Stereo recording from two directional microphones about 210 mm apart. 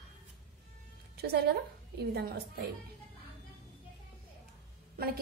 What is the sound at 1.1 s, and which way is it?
A woman's voice, 50° right (ahead or behind).